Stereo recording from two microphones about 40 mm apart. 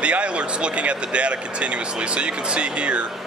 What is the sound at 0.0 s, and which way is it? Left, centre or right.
Speech, right.